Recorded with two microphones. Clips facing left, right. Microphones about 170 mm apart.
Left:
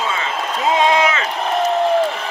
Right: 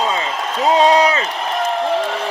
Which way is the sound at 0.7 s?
35° right (ahead or behind).